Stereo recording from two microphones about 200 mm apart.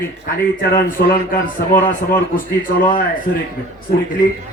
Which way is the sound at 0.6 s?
45° left (ahead or behind).